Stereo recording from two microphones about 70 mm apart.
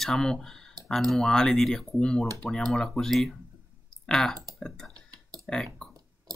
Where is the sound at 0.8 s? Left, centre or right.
Right.